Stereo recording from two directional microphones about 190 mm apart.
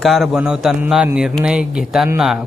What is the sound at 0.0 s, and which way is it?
Speech, centre (ahead or behind).